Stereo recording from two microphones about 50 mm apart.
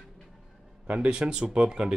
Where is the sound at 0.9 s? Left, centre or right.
Right.